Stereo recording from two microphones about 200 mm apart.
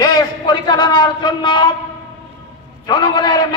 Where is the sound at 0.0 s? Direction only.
20° left (ahead or behind).